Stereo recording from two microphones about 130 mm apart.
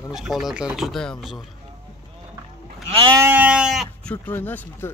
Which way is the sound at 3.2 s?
15° right (ahead or behind).